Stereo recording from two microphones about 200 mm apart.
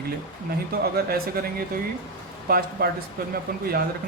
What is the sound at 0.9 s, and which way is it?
Speech, 50° right (ahead or behind).